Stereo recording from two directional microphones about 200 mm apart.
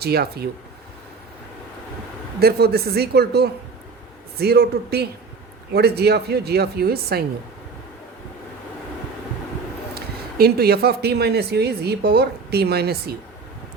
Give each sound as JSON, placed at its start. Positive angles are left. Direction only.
{"t": 0.0, "sound": "speech", "side_deg": -55}
{"t": 2.4, "sound": "speech", "side_deg": -50}
{"t": 9.9, "sound": "speech", "side_deg": -50}